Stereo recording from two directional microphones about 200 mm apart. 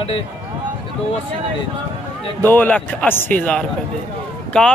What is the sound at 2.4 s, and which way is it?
A man's voice, 10° left (ahead or behind).